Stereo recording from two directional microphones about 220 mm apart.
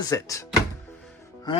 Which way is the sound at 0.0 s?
15° left (ahead or behind).